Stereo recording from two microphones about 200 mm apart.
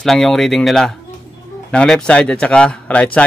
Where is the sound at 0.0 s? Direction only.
Centre (ahead or behind).